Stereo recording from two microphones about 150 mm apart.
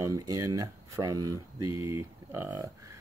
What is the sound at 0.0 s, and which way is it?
Speech, 20° right (ahead or behind).